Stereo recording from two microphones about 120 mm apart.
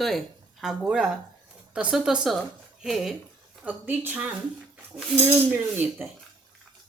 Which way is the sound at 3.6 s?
15° right (ahead or behind).